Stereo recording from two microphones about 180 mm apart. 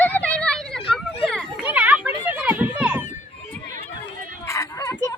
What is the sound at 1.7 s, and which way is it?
Children playing, 10° right (ahead or behind).